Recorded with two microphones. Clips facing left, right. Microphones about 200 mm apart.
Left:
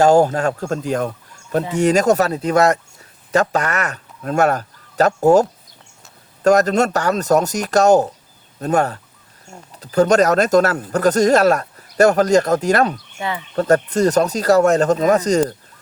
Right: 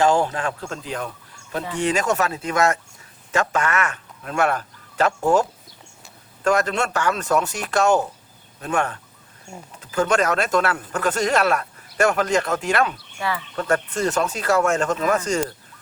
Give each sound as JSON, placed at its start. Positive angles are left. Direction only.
{"t": 0.0, "sound": "speech", "side_deg": 40}
{"t": 13.0, "sound": "speech", "side_deg": 20}
{"t": 13.6, "sound": "speech", "side_deg": 40}